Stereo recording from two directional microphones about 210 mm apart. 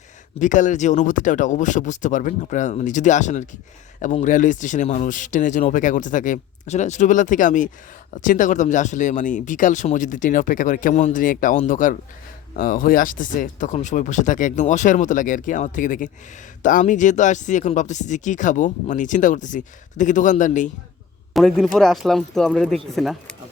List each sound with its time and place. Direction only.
0.3 s speech: 35° left (ahead or behind)
21.3 s speech: centre (ahead or behind)